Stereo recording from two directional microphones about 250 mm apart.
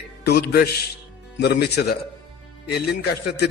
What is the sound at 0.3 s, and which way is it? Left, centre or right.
A man's voice, left.